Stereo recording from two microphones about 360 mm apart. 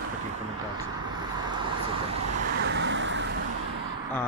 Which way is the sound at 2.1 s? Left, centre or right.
Right.